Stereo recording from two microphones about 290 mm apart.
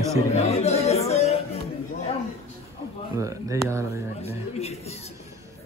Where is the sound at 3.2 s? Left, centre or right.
Centre.